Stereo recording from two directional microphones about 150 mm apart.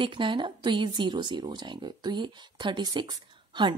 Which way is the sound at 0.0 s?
35° right (ahead or behind).